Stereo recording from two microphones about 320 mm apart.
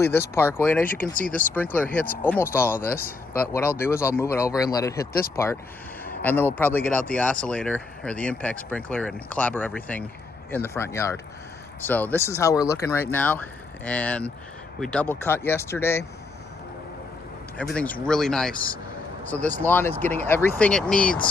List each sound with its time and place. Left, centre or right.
0.0 s speech: centre
1.1 s speech: left
1.5 s speech: centre
17.7 s speech: centre